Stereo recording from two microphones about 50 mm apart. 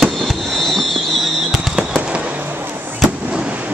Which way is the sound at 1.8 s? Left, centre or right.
Centre.